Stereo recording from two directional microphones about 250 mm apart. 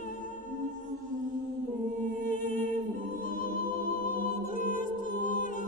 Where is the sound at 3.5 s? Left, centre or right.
Left.